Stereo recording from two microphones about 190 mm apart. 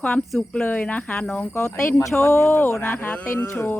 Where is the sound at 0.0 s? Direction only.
5° left (ahead or behind).